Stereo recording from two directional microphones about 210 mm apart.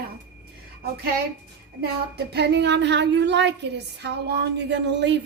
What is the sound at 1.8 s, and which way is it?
A woman's voice, 50° right (ahead or behind).